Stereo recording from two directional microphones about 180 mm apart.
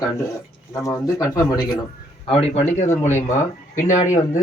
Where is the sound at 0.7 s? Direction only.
20° left (ahead or behind).